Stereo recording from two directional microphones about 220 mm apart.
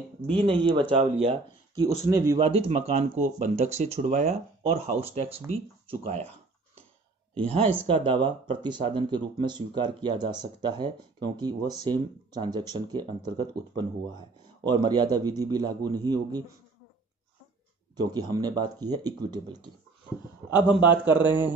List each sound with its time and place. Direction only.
0.3 s speech: 25° right (ahead or behind)
2.0 s speech: 15° right (ahead or behind)
7.3 s speech: 25° right (ahead or behind)
17.9 s speech: 20° right (ahead or behind)
20.4 s a man's voice: 5° right (ahead or behind)